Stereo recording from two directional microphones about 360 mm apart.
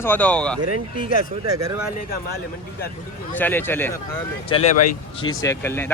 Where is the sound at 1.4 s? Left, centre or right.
Centre.